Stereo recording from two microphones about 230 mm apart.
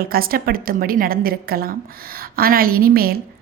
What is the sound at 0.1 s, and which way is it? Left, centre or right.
A woman's voice, right.